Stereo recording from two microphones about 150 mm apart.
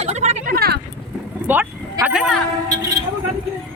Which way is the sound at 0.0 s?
50° right (ahead or behind).